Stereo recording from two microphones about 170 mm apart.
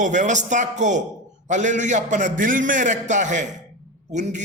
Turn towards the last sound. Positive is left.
turn(degrees=-45)  # may be behind; listen again after turning